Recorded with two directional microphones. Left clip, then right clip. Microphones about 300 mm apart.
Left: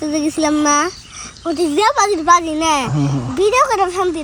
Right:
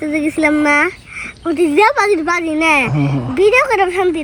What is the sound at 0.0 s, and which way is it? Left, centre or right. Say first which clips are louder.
A child's voice: right 2 dB; centre.